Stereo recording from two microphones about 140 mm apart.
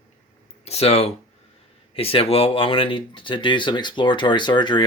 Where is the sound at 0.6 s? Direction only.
50° left (ahead or behind).